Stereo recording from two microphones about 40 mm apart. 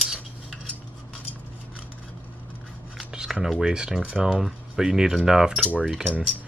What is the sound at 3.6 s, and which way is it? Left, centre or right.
Speech, centre.